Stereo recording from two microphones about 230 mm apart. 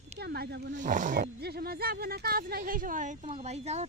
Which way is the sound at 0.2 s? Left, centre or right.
Right.